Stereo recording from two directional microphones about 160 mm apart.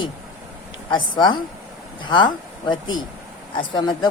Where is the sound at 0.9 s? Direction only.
30° left (ahead or behind).